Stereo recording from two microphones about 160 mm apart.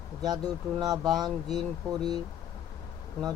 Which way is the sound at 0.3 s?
25° right (ahead or behind).